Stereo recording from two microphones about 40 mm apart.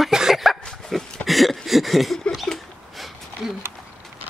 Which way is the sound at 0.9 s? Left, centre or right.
Centre.